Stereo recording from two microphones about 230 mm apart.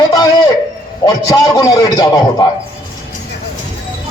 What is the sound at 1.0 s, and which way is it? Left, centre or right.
A man's voice, centre.